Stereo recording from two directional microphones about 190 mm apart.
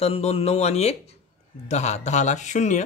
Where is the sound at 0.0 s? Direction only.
35° left (ahead or behind).